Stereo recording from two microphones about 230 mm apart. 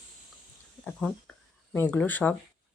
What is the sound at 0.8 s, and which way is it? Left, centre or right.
Speech, centre.